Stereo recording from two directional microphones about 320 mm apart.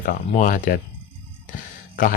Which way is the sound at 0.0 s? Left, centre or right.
Left.